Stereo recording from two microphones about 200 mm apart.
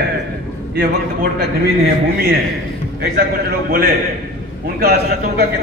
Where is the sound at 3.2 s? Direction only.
50° right (ahead or behind).